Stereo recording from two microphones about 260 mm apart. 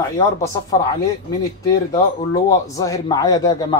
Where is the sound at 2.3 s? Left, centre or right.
Centre.